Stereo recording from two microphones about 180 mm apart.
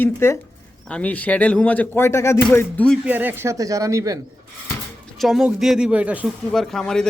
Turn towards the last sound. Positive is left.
turn(degrees=5)  # may be behind; listen again after turning